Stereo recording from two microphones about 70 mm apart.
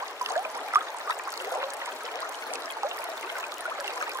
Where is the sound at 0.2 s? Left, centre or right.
Right.